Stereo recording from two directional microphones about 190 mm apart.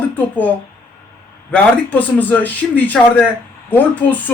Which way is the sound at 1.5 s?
10° left (ahead or behind).